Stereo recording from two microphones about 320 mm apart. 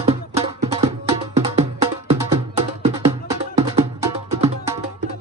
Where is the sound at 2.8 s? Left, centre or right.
Centre.